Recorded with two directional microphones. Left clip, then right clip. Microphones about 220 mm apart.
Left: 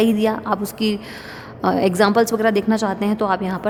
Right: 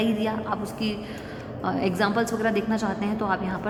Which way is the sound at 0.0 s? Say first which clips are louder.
Left 8 dB; 45° left (ahead or behind).